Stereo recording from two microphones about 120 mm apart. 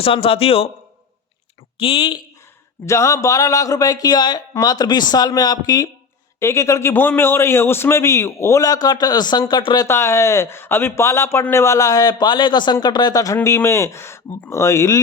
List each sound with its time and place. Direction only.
0.0 s a man's voice: 50° left (ahead or behind)
1.8 s a man's voice: 45° left (ahead or behind)
2.8 s a man's voice: 25° left (ahead or behind)
9.8 s a man's voice: 20° left (ahead or behind)